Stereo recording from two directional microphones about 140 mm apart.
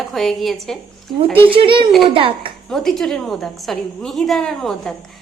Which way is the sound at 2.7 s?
Centre (ahead or behind).